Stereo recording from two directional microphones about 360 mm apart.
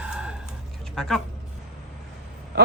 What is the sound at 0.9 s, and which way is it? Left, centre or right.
Speech, centre.